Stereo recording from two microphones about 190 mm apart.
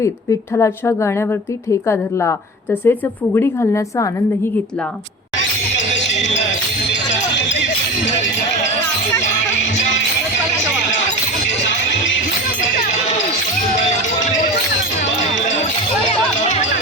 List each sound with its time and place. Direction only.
0.0 s a woman's voice: 15° left (ahead or behind)
6.1 s music: 40° left (ahead or behind)
7.3 s music: 75° left (ahead or behind)
13.7 s music: 40° left (ahead or behind)
16.0 s music: 40° left (ahead or behind)